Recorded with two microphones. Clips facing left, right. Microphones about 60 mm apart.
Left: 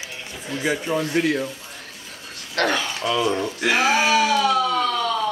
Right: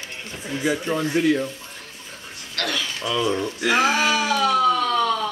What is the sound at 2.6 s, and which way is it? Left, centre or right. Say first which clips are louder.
Speech: left 5 dB; left.